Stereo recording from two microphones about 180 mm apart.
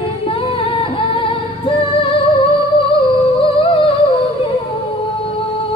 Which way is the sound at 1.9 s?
30° left (ahead or behind).